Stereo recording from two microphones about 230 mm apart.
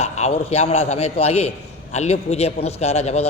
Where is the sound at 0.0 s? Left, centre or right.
Left.